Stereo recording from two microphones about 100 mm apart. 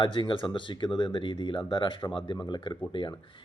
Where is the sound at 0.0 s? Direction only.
55° left (ahead or behind).